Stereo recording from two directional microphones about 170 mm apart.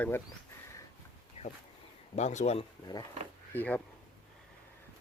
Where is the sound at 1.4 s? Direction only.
35° left (ahead or behind).